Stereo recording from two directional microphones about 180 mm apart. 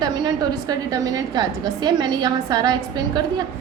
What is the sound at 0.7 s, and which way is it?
A woman's voice, 20° right (ahead or behind).